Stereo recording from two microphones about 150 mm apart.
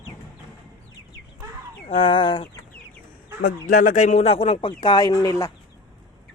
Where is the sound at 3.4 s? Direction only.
70° left (ahead or behind); by 5.5 s 25° left (ahead or behind).